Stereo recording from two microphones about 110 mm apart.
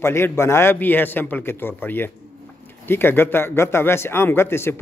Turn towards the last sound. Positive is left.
turn(degrees=20)  # may be behind; listen again after turning